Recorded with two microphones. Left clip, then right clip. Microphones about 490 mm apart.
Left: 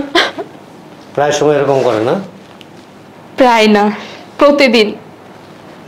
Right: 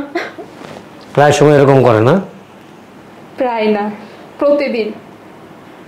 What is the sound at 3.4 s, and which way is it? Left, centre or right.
Speech, left.